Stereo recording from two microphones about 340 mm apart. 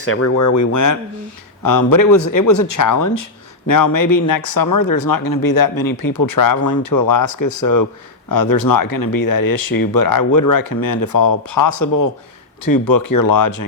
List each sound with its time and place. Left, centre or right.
0.0 s speech: left
3.7 s speech: left
8.3 s speech: left
12.6 s speech: left